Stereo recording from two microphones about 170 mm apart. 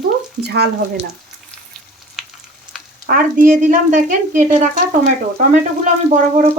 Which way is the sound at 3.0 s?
50° right (ahead or behind).